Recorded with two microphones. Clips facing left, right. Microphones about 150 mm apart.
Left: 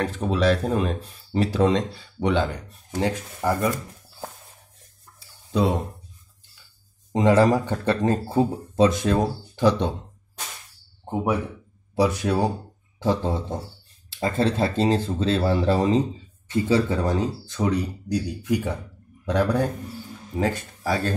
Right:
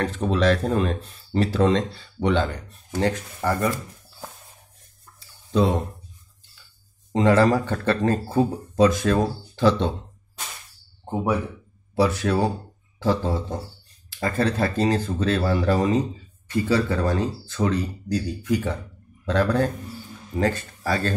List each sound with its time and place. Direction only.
0.0 s speech: 10° left (ahead or behind)
7.1 s speech: 15° left (ahead or behind)
11.9 s speech: 15° left (ahead or behind)